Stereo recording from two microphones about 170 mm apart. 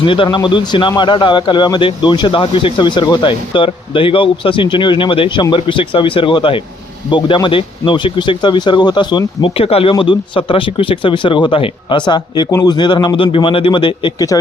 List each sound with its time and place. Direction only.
0.0 s speech: 30° left (ahead or behind)